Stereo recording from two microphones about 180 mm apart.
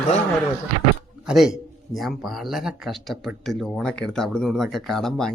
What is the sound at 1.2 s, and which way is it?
A man's voice, 5° right (ahead or behind).